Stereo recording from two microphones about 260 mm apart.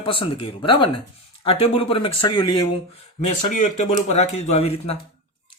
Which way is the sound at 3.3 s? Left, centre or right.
Left.